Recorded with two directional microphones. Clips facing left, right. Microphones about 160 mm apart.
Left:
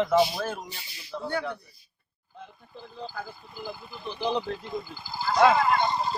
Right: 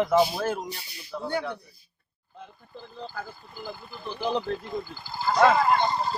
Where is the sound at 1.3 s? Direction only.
10° right (ahead or behind).